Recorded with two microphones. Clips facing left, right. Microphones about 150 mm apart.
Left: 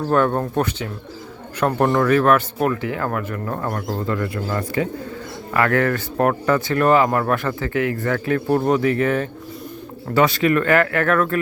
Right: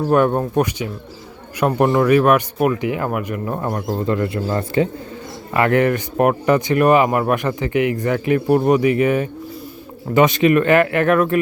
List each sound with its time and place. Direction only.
0.1 s speech: 15° right (ahead or behind)